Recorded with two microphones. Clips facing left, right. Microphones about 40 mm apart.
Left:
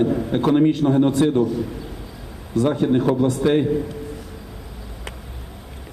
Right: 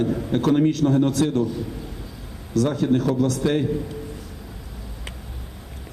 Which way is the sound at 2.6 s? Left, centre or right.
Left.